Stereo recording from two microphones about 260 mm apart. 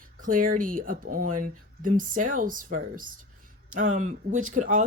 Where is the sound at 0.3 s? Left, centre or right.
Right.